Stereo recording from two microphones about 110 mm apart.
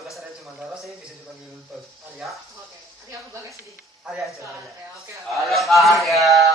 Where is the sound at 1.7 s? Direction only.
Centre (ahead or behind).